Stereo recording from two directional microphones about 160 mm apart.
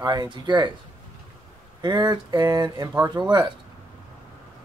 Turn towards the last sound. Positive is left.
turn(degrees=-25)  # may be behind; listen again after turning